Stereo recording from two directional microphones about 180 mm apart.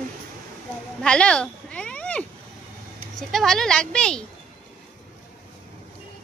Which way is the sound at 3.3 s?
Centre (ahead or behind).